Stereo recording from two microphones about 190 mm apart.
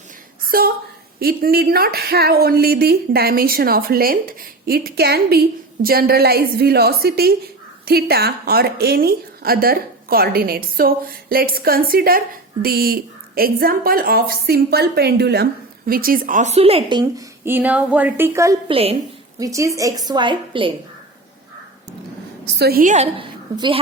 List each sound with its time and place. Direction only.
0.4 s a woman's voice: 50° right (ahead or behind); by 17.2 s 25° right (ahead or behind)
17.4 s speech: 10° right (ahead or behind)
18.7 s speech: 30° right (ahead or behind)
19.4 s a woman's voice: 15° right (ahead or behind)
22.5 s a woman's voice: 55° right (ahead or behind)
23.1 s a woman's voice: 25° right (ahead or behind)